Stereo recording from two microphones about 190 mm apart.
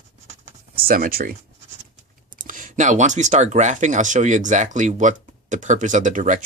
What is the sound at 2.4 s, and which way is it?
Speech, 45° right (ahead or behind).